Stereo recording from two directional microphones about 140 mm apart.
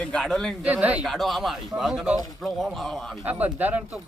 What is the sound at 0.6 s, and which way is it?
Speech, 10° right (ahead or behind).